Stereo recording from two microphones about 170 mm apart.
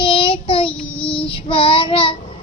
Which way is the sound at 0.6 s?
5° left (ahead or behind).